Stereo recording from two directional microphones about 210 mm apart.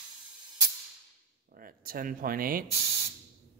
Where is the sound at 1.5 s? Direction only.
45° right (ahead or behind).